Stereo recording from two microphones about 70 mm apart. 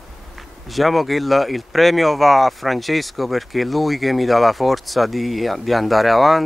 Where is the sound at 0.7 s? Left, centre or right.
Centre.